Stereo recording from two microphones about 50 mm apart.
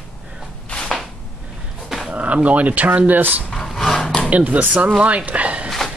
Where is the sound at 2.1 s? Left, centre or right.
Right.